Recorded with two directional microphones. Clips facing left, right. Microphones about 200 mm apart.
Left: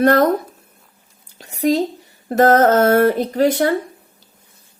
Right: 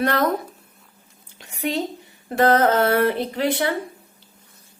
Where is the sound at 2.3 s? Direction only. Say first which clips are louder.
Left 5 dB; 45° left (ahead or behind).